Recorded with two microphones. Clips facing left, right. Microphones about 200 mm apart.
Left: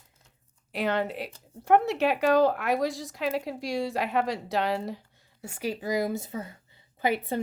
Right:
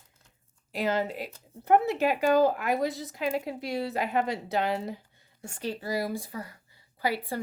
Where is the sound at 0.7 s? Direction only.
Centre (ahead or behind).